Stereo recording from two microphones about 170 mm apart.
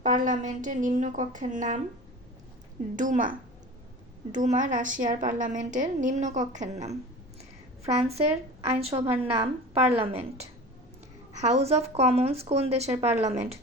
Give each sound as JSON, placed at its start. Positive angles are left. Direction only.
{"t": 0.0, "sound": "a woman's voice", "side_deg": -50}
{"t": 2.9, "sound": "a woman's voice", "side_deg": -50}
{"t": 7.9, "sound": "a woman's voice", "side_deg": -35}